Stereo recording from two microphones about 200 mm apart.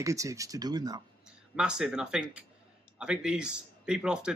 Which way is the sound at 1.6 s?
5° right (ahead or behind).